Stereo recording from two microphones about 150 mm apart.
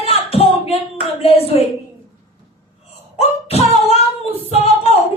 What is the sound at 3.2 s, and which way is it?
Singing, 40° left (ahead or behind).